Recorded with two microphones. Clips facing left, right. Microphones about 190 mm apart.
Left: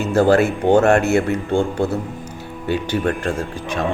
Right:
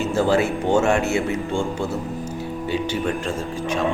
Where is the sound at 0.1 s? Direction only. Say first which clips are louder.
Left 6 dB; 60° left (ahead or behind).